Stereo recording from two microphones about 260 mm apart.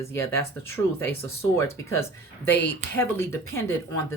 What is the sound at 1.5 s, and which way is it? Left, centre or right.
Speech, centre.